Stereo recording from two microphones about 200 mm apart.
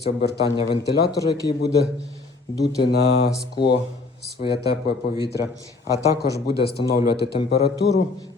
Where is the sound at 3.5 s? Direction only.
55° left (ahead or behind).